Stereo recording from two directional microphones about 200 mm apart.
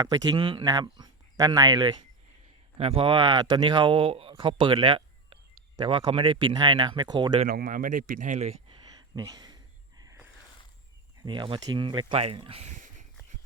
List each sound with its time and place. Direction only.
0.0 s speech: 20° right (ahead or behind)
7.4 s speech: 45° right (ahead or behind); by 9.6 s 20° right (ahead or behind)
11.3 s speech: 25° right (ahead or behind)